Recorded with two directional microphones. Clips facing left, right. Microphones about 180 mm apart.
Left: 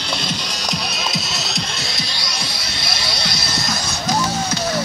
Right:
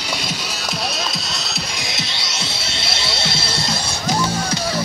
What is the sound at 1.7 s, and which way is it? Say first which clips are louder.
Music: even; 20° right (ahead or behind).